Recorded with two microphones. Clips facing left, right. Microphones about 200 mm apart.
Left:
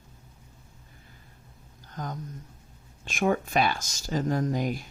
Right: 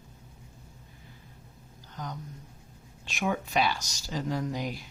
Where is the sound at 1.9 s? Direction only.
45° left (ahead or behind).